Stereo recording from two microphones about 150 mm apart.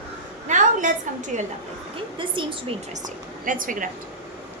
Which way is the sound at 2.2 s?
35° right (ahead or behind).